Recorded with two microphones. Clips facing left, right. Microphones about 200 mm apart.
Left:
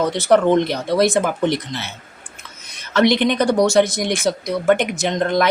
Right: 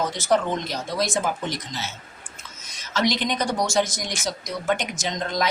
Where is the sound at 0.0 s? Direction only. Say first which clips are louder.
Left 7 dB; 65° left (ahead or behind).